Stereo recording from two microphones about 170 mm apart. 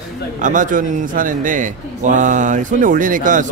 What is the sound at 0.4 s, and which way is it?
A man's voice, 50° right (ahead or behind).